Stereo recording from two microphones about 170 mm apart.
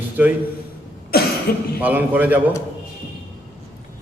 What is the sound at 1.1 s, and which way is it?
Cough, 65° left (ahead or behind).